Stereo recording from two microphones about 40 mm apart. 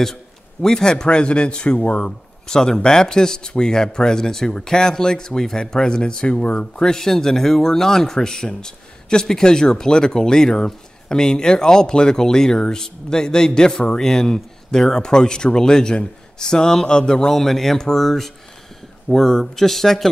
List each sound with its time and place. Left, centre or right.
0.0 s a man's voice: centre